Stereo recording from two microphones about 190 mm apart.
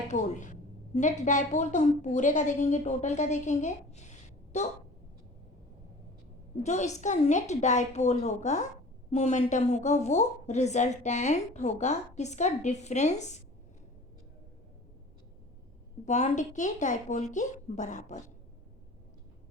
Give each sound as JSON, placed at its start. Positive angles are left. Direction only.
{"t": 0.1, "sound": "a woman's voice", "side_deg": 40}
{"t": 6.6, "sound": "a woman's voice", "side_deg": 35}
{"t": 16.0, "sound": "a woman's voice", "side_deg": 40}